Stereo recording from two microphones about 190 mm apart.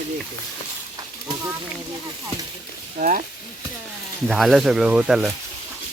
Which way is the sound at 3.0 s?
45° right (ahead or behind).